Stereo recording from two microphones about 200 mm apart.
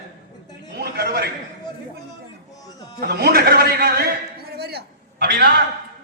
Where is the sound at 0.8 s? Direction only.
50° right (ahead or behind).